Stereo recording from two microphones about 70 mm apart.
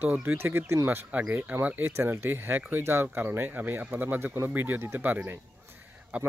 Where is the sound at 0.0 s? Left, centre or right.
Right.